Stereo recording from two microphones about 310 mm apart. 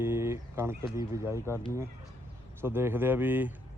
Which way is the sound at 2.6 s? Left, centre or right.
Centre.